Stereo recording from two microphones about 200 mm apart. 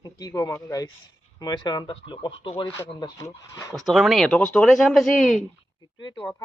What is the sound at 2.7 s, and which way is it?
Speech, 15° left (ahead or behind).